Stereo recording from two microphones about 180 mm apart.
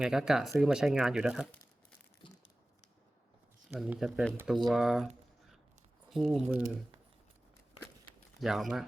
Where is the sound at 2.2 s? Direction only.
30° left (ahead or behind).